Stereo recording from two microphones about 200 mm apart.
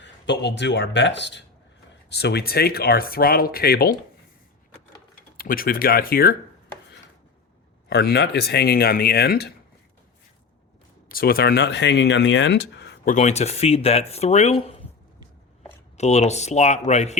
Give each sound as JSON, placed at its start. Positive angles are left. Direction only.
{"t": 0.0, "sound": "speech", "side_deg": 60}
{"t": 5.4, "sound": "speech", "side_deg": 45}
{"t": 7.9, "sound": "speech", "side_deg": 55}
{"t": 11.1, "sound": "speech", "side_deg": 50}
{"t": 13.1, "sound": "speech", "side_deg": 35}
{"t": 16.0, "sound": "speech", "side_deg": 35}